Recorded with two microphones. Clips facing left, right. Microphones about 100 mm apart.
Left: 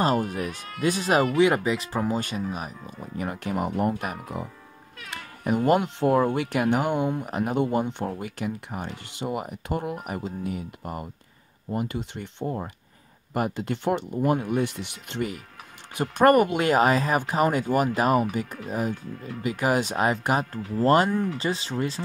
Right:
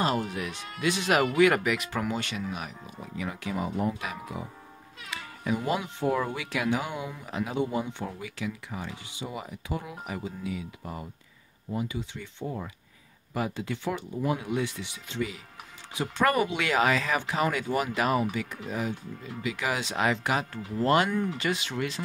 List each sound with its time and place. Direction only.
0.0 s speech: 40° left (ahead or behind)